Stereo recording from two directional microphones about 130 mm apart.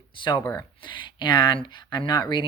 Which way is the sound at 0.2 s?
35° left (ahead or behind).